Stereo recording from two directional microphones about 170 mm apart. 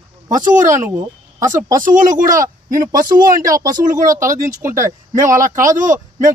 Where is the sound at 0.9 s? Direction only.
20° right (ahead or behind).